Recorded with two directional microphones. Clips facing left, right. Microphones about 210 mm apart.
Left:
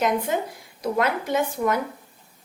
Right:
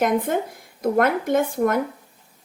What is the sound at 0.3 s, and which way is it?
A woman's voice, 50° right (ahead or behind).